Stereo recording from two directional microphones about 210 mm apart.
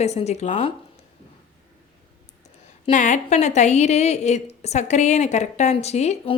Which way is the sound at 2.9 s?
35° left (ahead or behind).